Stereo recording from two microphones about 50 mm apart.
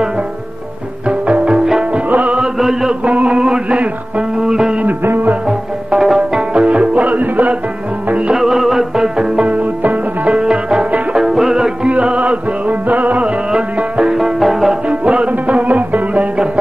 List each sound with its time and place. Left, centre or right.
1.0 s music: right
2.0 s music: right
2.3 s chant: centre
3.1 s male singing: right
4.4 s music: centre
4.8 s music: right
5.9 s music: centre
6.6 s music: right
8.4 s music: centre
9.4 s music: right
11.9 s music: right
13.5 s music: right
14.1 s music: centre
14.9 s music: right